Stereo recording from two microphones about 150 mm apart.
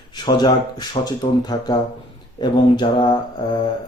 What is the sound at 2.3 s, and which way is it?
Mantra, 30° left (ahead or behind).